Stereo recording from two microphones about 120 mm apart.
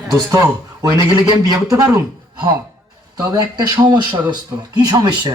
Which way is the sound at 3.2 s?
35° right (ahead or behind).